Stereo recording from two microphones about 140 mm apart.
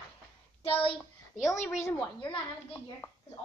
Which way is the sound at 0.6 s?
40° left (ahead or behind).